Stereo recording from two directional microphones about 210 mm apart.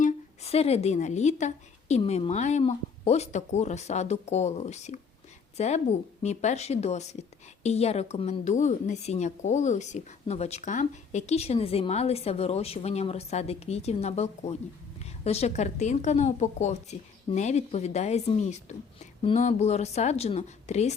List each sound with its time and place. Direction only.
0.0 s a woman's voice: 30° left (ahead or behind)